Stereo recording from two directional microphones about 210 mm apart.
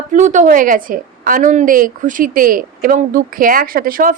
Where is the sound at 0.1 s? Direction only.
35° right (ahead or behind).